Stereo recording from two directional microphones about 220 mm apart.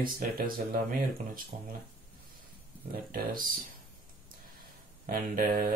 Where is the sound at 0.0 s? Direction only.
40° right (ahead or behind).